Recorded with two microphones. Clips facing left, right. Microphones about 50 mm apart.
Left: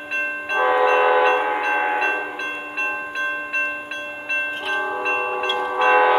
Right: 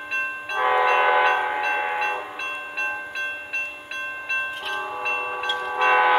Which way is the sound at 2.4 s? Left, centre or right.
Left.